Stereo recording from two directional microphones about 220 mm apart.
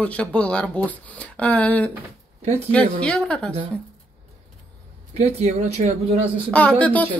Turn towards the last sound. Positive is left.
turn(degrees=5)  # may be behind; listen again after turning